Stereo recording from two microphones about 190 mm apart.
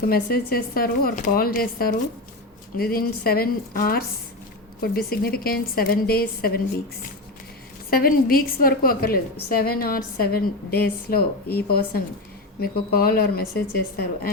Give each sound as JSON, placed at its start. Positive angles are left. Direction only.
{"t": 0.1, "sound": "a woman's voice", "side_deg": 55}
{"t": 7.9, "sound": "a woman's voice", "side_deg": 50}